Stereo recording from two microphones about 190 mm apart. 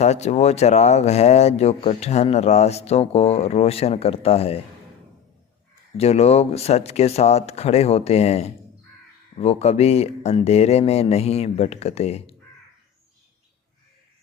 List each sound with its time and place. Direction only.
0.0 s speech: 35° left (ahead or behind)
6.0 s speech: 35° left (ahead or behind)